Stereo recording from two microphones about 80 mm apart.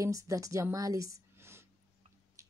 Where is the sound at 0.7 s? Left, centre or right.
Right.